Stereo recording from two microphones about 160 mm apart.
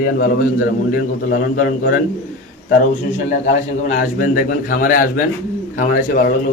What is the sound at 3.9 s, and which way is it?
A man's voice, 60° left (ahead or behind).